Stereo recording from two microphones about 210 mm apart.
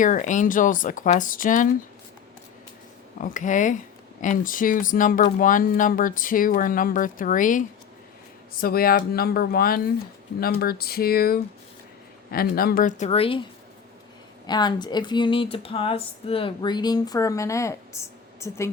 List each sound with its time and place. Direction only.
0.0 s speech: 40° left (ahead or behind)
3.2 s speech: 35° left (ahead or behind)
14.4 s speech: 20° left (ahead or behind)